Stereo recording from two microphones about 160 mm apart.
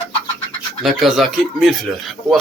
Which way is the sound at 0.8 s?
Centre (ahead or behind).